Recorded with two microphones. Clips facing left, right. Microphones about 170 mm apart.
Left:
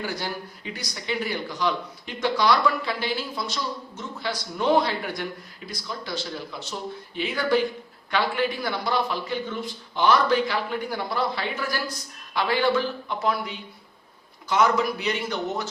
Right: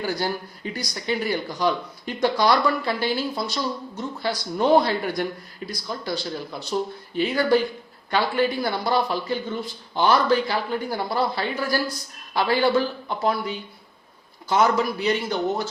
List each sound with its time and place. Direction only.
0.0 s speech: 40° right (ahead or behind)